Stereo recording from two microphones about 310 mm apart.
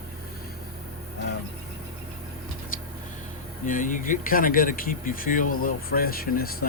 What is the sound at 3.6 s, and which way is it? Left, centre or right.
Speech, left.